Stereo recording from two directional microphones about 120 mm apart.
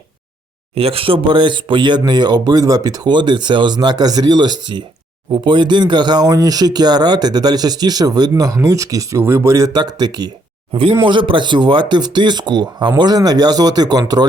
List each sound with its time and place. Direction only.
0.8 s speech: 50° right (ahead or behind); by 14.0 s 35° right (ahead or behind)